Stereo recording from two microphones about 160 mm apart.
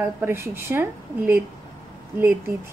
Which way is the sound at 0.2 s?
15° right (ahead or behind).